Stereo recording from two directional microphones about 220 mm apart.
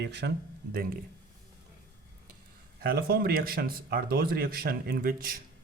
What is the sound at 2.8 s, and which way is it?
A man's voice, 45° right (ahead or behind).